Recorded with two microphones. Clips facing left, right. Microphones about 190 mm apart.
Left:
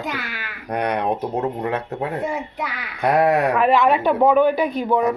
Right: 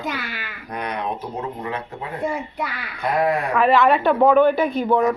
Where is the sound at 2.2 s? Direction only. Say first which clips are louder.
Even; centre (ahead or behind).